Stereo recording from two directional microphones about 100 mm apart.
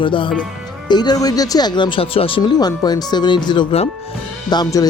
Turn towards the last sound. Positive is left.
turn(degrees=45)  # may be behind; listen again after turning